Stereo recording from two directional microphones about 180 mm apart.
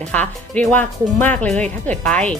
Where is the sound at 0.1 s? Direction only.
10° left (ahead or behind).